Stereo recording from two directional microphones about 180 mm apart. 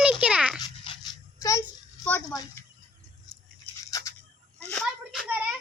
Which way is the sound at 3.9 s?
20° left (ahead or behind).